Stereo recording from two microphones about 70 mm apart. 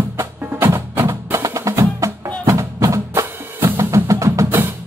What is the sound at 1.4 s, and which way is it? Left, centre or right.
Music, right.